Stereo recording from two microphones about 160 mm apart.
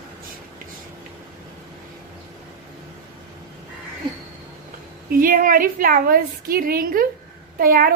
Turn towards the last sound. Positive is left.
turn(degrees=-65)  # may be behind; listen again after turning